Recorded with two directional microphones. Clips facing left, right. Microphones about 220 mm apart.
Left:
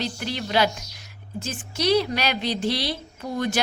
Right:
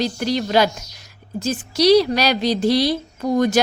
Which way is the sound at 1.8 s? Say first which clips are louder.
Right 7 dB; 35° right (ahead or behind).